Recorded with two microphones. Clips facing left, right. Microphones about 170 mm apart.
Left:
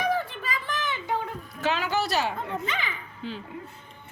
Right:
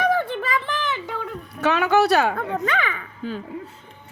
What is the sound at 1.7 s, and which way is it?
A child's voice, 65° right (ahead or behind).